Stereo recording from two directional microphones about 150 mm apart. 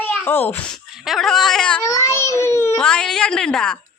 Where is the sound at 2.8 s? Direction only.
5° left (ahead or behind).